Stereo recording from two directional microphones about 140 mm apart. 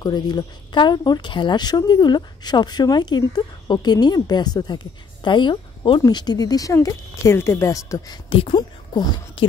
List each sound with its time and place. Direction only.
0.0 s speech: 30° left (ahead or behind)
8.3 s speech: 35° left (ahead or behind)